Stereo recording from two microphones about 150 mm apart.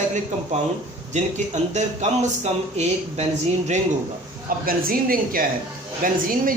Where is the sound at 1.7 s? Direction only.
50° right (ahead or behind).